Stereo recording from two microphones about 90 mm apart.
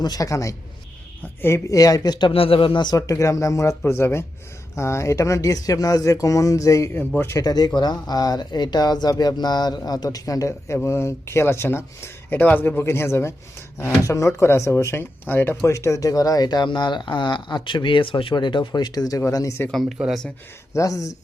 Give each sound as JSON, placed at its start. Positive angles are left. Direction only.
{"t": 0.0, "sound": "speech", "side_deg": 45}
{"t": 2.8, "sound": "speech", "side_deg": 40}
{"t": 7.0, "sound": "speech", "side_deg": 20}
{"t": 7.3, "sound": "speech", "side_deg": 45}
{"t": 15.7, "sound": "speech", "side_deg": 35}
{"t": 19.7, "sound": "speech", "side_deg": -5}
{"t": 20.7, "sound": "speech", "side_deg": 35}